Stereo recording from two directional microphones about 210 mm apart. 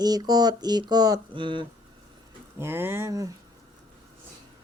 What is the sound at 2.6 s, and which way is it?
Speech, 10° right (ahead or behind).